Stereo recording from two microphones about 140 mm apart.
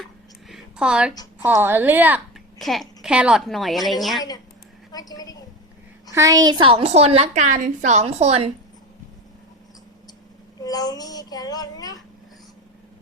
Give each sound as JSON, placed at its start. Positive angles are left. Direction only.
{"t": 0.0, "sound": "a sound", "side_deg": 0}
{"t": 1.5, "sound": "a woman's voice", "side_deg": -15}
{"t": 2.6, "sound": "a woman's voice", "side_deg": 0}
{"t": 4.9, "sound": "speech", "side_deg": 25}
{"t": 6.1, "sound": "a woman's voice", "side_deg": -25}
{"t": 10.6, "sound": "speech", "side_deg": 25}